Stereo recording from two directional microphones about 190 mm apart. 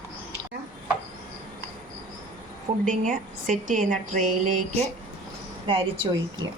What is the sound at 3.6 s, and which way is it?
A woman's voice, 40° right (ahead or behind).